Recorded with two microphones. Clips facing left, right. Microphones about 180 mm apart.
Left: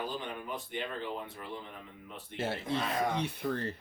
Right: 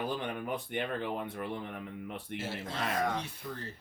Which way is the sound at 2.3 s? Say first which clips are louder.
Left 5 dB; 60° left (ahead or behind).